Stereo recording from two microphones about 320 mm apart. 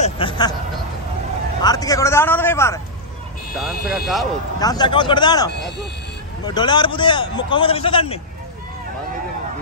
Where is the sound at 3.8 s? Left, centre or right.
Left.